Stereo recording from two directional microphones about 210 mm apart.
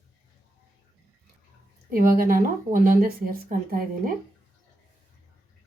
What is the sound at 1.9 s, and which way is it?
A woman's voice, 45° right (ahead or behind).